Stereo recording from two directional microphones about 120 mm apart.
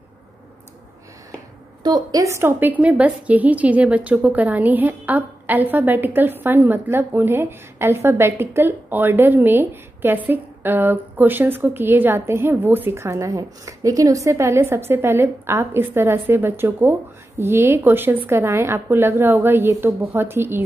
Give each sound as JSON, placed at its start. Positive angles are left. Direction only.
{"t": 1.8, "sound": "a woman's voice", "side_deg": -35}